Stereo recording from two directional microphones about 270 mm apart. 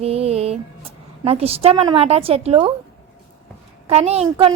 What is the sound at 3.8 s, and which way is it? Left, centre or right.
Speech, right.